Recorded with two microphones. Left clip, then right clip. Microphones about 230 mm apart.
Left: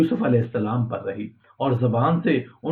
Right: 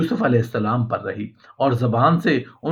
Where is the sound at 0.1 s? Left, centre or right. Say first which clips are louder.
Right 2 dB; right.